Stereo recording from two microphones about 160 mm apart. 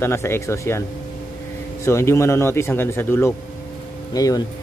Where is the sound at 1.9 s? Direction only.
15° left (ahead or behind).